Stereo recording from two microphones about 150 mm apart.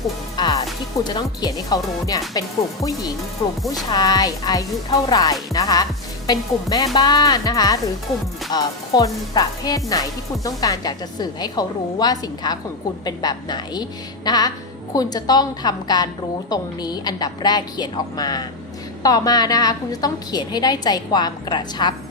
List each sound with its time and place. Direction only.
0.3 s music: 30° left (ahead or behind)
1.0 s speech: 25° left (ahead or behind)
3.7 s speech: 25° left (ahead or behind)